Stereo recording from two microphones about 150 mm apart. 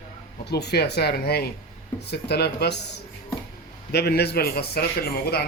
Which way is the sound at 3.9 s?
90° left.